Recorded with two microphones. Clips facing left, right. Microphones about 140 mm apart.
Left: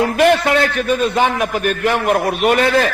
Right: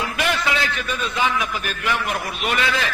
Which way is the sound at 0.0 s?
50° left (ahead or behind).